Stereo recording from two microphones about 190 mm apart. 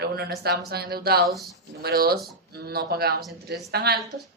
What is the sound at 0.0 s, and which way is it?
Speech, 55° right (ahead or behind).